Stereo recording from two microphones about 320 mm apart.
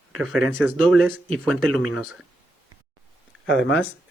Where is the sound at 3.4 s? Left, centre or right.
Left.